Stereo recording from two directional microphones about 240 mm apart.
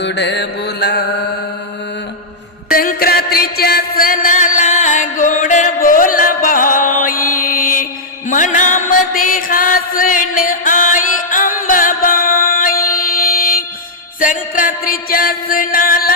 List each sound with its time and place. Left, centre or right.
0.0 s mantra: left
2.6 s music: left